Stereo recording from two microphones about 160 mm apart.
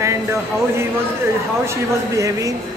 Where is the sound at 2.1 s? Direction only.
20° right (ahead or behind).